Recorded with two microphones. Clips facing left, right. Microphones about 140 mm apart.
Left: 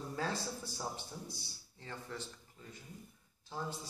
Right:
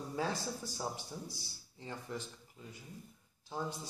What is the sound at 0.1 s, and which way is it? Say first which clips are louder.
A man's voice: right 2 dB; 15° right (ahead or behind).